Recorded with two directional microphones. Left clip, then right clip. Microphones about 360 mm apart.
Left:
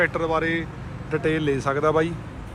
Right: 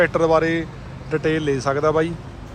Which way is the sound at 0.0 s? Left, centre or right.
Centre.